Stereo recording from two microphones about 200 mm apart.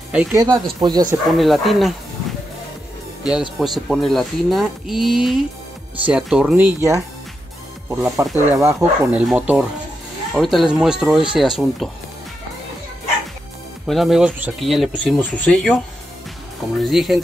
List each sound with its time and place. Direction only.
0.1 s speech: 5° right (ahead or behind)
0.4 s speech: 20° right (ahead or behind)
1.3 s speech: centre (ahead or behind)
3.3 s speech: centre (ahead or behind)
13.8 s speech: centre (ahead or behind)